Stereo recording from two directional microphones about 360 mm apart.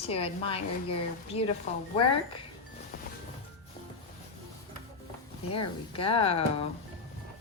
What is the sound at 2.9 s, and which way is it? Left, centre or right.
Music, left.